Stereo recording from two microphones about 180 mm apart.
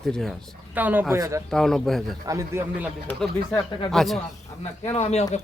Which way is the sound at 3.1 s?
5° left (ahead or behind).